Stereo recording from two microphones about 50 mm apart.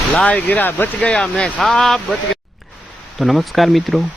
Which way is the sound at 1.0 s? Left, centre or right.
Left.